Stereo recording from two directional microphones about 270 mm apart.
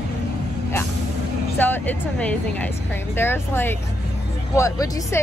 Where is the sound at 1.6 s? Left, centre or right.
Centre.